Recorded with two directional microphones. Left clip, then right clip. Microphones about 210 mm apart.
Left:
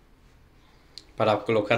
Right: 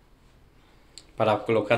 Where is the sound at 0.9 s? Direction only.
Centre (ahead or behind).